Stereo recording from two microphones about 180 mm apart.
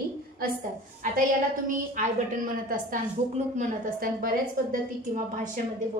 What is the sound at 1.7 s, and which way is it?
A woman's voice, 45° right (ahead or behind).